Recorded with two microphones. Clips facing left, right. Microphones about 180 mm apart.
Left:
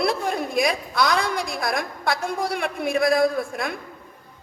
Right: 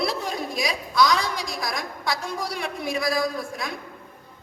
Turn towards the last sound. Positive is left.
turn(degrees=55)  # may be behind; listen again after turning